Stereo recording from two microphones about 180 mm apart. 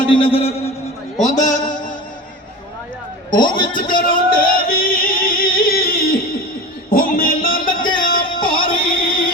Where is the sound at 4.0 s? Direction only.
50° left (ahead or behind).